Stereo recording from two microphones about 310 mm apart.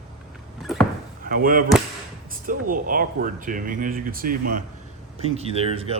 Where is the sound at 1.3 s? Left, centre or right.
Right.